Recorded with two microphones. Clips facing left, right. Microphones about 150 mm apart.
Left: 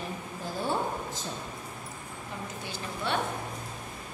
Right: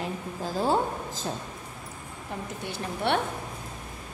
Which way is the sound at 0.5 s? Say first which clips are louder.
Right 5 dB; 90° right.